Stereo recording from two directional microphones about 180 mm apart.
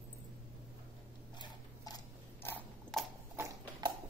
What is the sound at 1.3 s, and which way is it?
Biting, 25° left (ahead or behind).